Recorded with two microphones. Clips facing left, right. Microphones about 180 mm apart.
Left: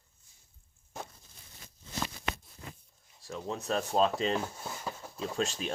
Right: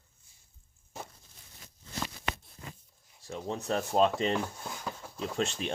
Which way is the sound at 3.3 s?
35° right (ahead or behind).